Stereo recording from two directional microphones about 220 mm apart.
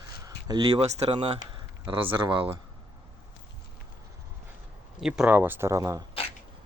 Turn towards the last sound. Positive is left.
turn(degrees=-15)  # may be behind; listen again after turning